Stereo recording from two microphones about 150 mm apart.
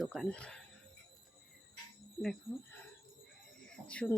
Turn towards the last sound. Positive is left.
turn(degrees=10)  # may be behind; listen again after turning